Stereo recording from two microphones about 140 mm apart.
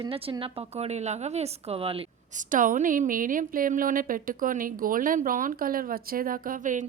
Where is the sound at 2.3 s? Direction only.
65° right (ahead or behind).